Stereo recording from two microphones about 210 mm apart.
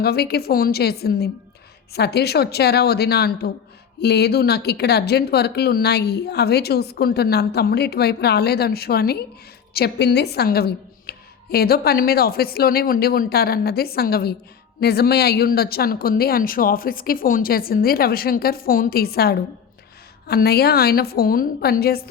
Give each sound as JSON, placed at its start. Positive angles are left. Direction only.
{"t": 0.0, "sound": "speech", "side_deg": 50}